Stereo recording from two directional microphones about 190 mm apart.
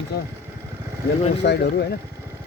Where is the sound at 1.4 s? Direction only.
55° left (ahead or behind).